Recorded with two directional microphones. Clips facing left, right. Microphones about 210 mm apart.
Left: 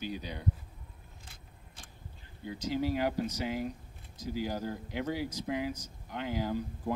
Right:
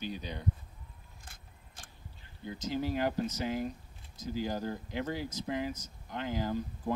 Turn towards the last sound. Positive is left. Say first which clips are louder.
# even
turn(degrees=10)  # may be behind; listen again after turning